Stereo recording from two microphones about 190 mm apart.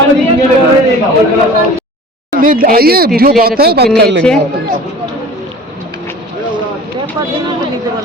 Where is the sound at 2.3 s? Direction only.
50° right (ahead or behind).